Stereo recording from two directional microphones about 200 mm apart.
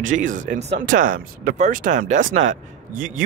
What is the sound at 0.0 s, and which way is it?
Speech, 40° right (ahead or behind).